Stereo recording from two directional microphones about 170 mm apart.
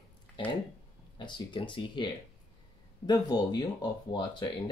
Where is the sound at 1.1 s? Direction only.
30° left (ahead or behind).